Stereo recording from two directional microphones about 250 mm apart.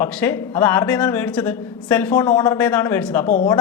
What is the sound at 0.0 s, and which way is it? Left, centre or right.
A woman's voice, centre.